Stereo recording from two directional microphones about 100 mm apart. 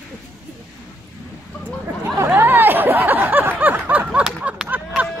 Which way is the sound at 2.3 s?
20° right (ahead or behind).